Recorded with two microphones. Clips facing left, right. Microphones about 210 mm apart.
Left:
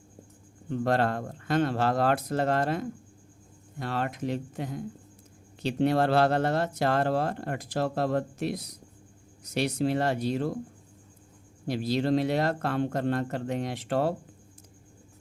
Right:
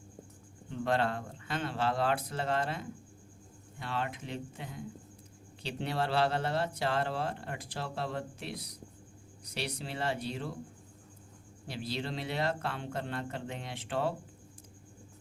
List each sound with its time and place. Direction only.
0.7 s speech: 45° left (ahead or behind)
11.7 s speech: 45° left (ahead or behind)